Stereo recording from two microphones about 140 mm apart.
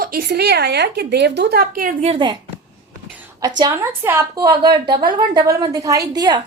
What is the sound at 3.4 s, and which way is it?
Speech, 25° right (ahead or behind).